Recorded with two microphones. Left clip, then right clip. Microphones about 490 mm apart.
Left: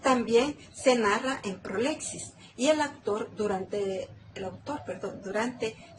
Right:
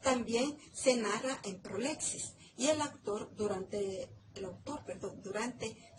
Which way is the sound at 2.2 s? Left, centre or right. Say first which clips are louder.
Left 8 dB; left.